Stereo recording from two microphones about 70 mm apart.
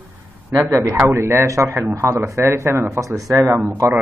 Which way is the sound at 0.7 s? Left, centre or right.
Right.